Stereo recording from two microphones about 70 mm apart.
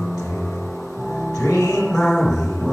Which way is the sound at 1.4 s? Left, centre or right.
Left.